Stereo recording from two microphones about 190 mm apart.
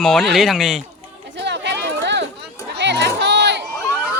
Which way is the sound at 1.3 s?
65° right (ahead or behind).